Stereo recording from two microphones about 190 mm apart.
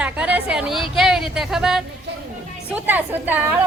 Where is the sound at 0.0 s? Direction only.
5° right (ahead or behind).